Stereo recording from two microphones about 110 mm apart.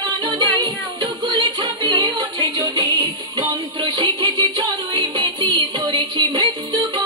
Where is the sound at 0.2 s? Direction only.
35° right (ahead or behind).